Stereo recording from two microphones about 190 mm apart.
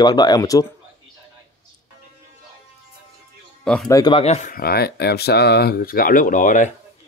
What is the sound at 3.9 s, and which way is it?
Speech, 25° left (ahead or behind).